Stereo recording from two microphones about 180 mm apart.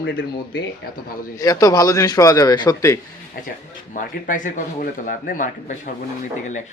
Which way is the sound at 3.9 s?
45° left (ahead or behind).